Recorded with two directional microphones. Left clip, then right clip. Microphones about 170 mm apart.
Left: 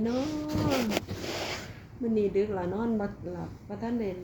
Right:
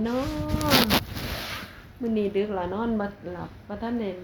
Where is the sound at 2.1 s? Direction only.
10° left (ahead or behind).